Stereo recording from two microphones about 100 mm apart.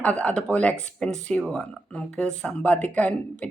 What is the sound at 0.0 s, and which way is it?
Speech, 10° left (ahead or behind).